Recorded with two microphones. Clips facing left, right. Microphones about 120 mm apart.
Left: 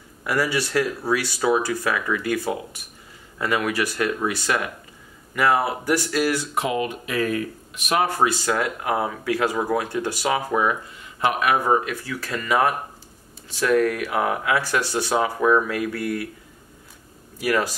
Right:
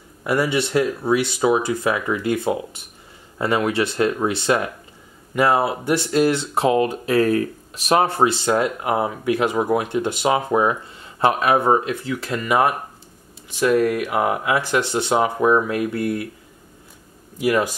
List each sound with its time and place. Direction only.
0.2 s speech: 25° right (ahead or behind)
17.4 s speech: 20° right (ahead or behind)